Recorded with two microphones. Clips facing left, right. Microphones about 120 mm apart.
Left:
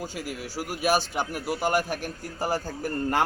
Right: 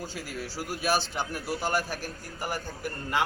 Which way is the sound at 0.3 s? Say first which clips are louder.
Left 2 dB; 10° left (ahead or behind).